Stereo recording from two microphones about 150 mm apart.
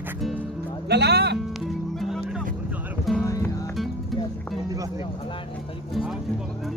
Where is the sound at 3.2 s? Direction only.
20° left (ahead or behind).